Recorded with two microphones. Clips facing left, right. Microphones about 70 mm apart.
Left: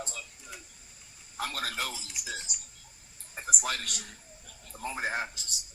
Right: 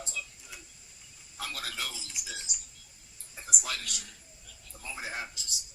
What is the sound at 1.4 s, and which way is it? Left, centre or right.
A man's voice, left.